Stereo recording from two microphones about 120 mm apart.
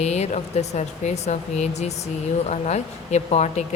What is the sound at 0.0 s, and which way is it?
Speech, 70° left (ahead or behind).